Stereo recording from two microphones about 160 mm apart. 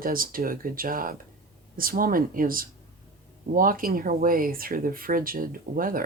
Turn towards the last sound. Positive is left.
turn(degrees=-60)  # may be behind; listen again after turning